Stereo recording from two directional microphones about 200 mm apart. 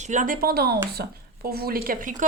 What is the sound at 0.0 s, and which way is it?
A woman's voice, 40° right (ahead or behind).